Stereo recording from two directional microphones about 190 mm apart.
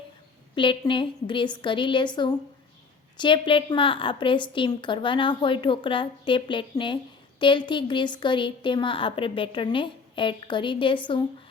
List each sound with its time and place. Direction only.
0.5 s a woman's voice: 25° left (ahead or behind)